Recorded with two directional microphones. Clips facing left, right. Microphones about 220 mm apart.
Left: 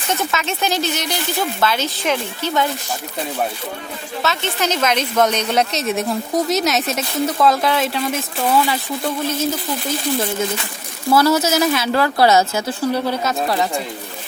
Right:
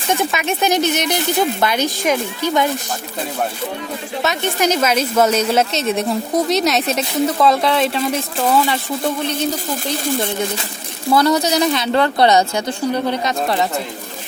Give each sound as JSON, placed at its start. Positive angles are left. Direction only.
{"t": 0.1, "sound": "speech", "side_deg": -15}
{"t": 4.2, "sound": "a woman's voice", "side_deg": -15}
{"t": 11.2, "sound": "a woman's voice", "side_deg": 5}